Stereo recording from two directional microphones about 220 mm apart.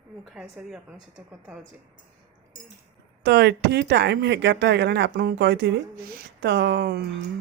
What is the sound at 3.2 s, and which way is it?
Speech, 50° right (ahead or behind).